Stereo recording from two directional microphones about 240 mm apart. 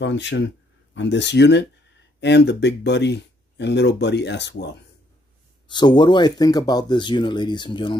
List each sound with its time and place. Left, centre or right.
0.0 s speech: left
5.7 s speech: centre